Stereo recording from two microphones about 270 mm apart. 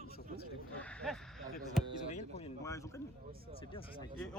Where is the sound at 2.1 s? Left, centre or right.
Left.